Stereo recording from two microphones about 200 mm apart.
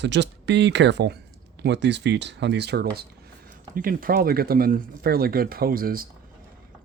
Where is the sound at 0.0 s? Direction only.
60° right (ahead or behind).